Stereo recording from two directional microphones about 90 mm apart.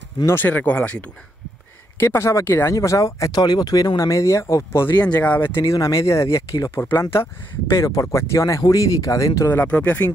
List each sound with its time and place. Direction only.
0.3 s speech: 20° left (ahead or behind)
2.0 s speech: 25° left (ahead or behind)
5.2 s speech: 20° left (ahead or behind)
5.6 s speech: 35° left (ahead or behind)
6.8 s speech: 25° left (ahead or behind)
9.5 s speech: 20° left (ahead or behind)